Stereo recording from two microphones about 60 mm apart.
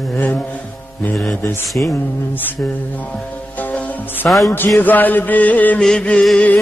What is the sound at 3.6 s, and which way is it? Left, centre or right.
Music, left.